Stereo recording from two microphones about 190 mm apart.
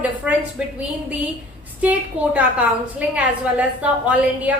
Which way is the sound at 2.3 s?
5° right (ahead or behind).